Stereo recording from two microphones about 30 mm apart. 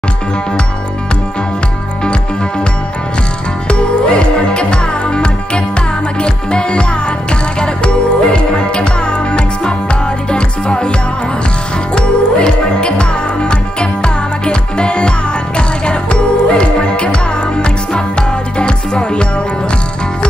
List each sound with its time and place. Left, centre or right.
3.6 s music: left
11.9 s music: left